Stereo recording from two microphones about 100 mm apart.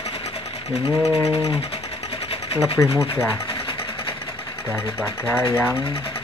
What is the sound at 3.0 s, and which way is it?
Speech, 5° right (ahead or behind).